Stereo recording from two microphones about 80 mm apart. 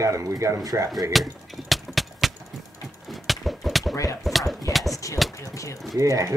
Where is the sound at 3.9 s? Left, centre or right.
Left.